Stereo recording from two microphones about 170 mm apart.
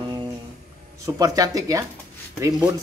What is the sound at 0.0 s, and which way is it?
Music, 25° right (ahead or behind).